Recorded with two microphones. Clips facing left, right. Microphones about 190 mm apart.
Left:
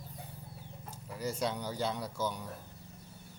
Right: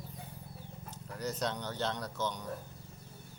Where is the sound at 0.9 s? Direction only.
10° left (ahead or behind).